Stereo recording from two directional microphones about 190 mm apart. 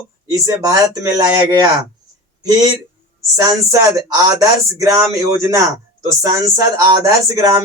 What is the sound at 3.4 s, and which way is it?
Speech, 15° right (ahead or behind).